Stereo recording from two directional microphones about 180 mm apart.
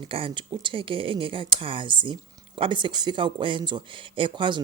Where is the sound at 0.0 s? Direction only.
30° right (ahead or behind).